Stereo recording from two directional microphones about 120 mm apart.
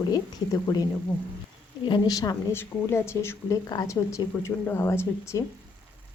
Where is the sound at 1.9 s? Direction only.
30° left (ahead or behind).